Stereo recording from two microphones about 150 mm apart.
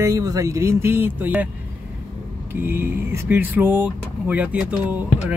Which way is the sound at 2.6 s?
15° right (ahead or behind).